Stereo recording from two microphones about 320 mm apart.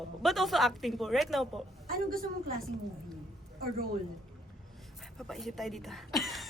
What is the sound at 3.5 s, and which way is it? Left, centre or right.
Speech, right.